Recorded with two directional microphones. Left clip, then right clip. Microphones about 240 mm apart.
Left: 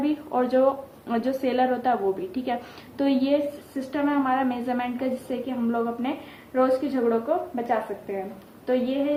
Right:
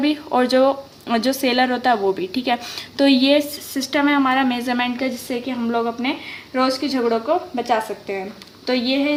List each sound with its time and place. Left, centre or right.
0.0 s a woman's voice: right